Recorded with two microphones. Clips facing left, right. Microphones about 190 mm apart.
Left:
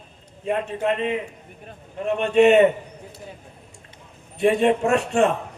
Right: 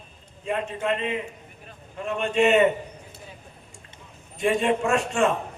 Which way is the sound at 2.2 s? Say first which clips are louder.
Left 5 dB; 35° left (ahead or behind).